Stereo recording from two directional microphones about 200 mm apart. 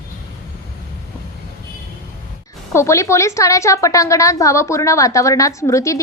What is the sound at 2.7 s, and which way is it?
A woman's voice, 15° left (ahead or behind).